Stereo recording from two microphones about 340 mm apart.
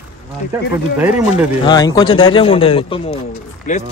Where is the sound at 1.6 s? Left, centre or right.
Centre.